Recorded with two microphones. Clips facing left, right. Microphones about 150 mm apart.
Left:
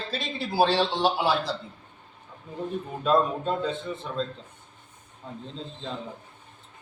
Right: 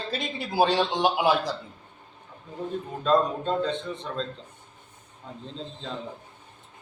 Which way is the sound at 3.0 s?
5° left (ahead or behind).